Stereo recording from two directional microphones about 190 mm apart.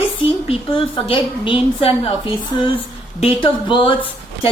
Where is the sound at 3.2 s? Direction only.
25° left (ahead or behind).